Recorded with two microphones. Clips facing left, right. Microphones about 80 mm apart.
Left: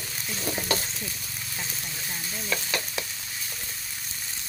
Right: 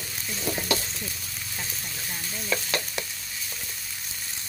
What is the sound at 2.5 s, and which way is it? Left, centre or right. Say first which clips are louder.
Speech: right 2 dB; centre.